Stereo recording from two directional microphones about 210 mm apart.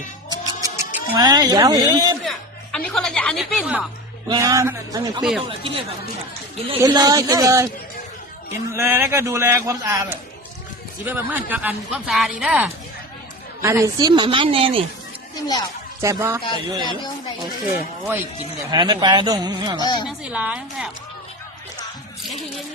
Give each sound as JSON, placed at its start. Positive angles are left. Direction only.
{"t": 0.3, "sound": "music", "side_deg": -15}
{"t": 1.1, "sound": "a man's voice", "side_deg": -20}
{"t": 2.7, "sound": "a woman's voice", "side_deg": 5}
{"t": 4.3, "sound": "a man's voice", "side_deg": -15}
{"t": 8.7, "sound": "a man's voice", "side_deg": -10}
{"t": 15.4, "sound": "speech", "side_deg": 20}
{"t": 16.0, "sound": "a man's voice", "side_deg": -15}
{"t": 18.7, "sound": "a woman's voice", "side_deg": -20}
{"t": 19.8, "sound": "speech", "side_deg": 20}
{"t": 20.1, "sound": "a woman's voice", "side_deg": -5}